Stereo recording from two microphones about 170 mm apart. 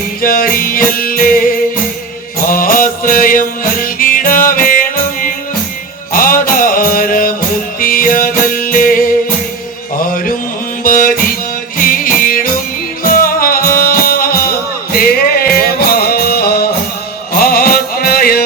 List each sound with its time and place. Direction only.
0.2 s music: 60° left (ahead or behind)